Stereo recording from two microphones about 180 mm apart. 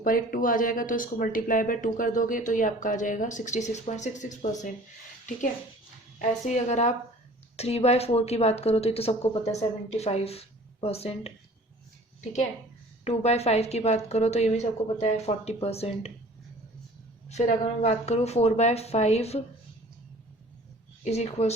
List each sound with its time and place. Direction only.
0.0 s speech: 50° left (ahead or behind)
6.1 s speech: 40° left (ahead or behind)
13.1 s speech: 35° left (ahead or behind)
17.2 s speech: 40° left (ahead or behind)
21.0 s speech: 35° left (ahead or behind)